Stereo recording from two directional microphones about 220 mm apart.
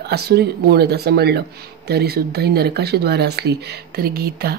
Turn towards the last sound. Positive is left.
turn(degrees=-45)  # may be behind; listen again after turning